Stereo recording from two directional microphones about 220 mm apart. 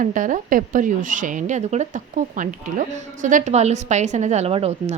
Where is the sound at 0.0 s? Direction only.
35° right (ahead or behind).